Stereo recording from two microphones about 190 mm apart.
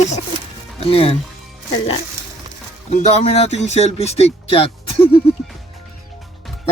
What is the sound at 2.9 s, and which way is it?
Speech, 35° left (ahead or behind).